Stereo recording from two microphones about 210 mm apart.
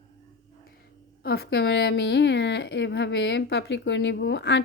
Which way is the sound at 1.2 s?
50° left (ahead or behind).